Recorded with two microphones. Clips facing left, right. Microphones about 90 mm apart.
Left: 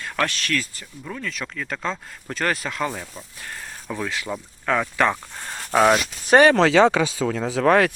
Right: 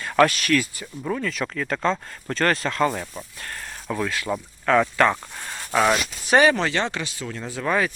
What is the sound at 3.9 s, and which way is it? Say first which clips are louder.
Speech: right 2 dB; 15° left (ahead or behind).